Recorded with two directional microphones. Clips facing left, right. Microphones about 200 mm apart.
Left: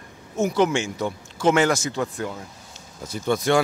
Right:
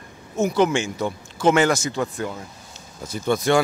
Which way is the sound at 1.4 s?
15° right (ahead or behind).